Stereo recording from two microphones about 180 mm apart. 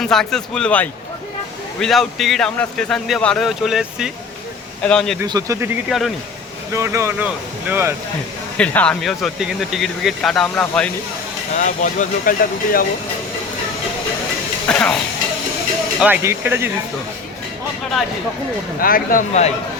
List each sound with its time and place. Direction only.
0.0 s speech: centre (ahead or behind)
5.2 s speech: 20° right (ahead or behind)
5.9 s speech: centre (ahead or behind)
6.7 s speech: 15° right (ahead or behind)
8.5 s speech: 5° left (ahead or behind)
11.5 s speech: 45° left (ahead or behind)
14.7 s speech: 5° left (ahead or behind)
16.0 s speech: 10° right (ahead or behind)
18.8 s speech: 55° left (ahead or behind)